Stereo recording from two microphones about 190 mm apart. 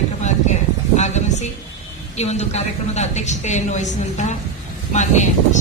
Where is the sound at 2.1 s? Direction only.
35° left (ahead or behind).